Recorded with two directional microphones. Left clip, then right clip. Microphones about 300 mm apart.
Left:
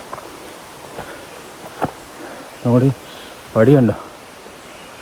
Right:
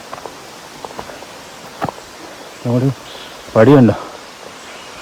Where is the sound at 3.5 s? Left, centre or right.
Right.